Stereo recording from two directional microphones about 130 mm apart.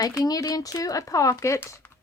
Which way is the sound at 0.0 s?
30° left (ahead or behind).